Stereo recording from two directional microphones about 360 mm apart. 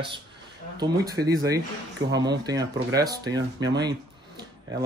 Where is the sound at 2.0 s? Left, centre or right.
Right.